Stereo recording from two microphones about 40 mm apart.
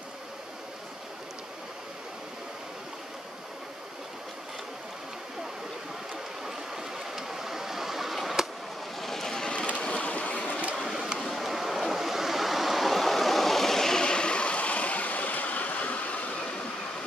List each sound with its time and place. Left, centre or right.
6.4 s stream: centre
9.0 s vehicle: centre
9.8 s vehicle: left
10.9 s vehicle: centre
11.2 s waves: centre; by 16.4 s left